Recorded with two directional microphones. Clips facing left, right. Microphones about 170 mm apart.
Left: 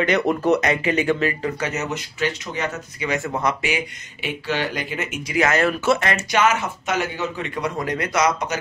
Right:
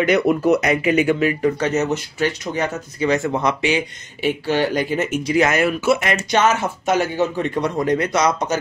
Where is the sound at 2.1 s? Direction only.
35° right (ahead or behind).